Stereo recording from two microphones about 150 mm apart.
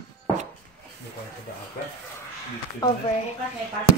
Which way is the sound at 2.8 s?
25° left (ahead or behind).